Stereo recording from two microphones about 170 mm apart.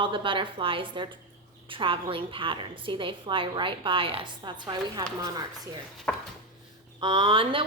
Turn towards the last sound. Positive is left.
turn(degrees=-30)  # may be behind; listen again after turning